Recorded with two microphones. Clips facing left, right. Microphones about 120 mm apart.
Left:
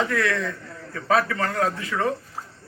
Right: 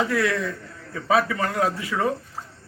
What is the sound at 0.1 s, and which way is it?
Speech, 15° right (ahead or behind).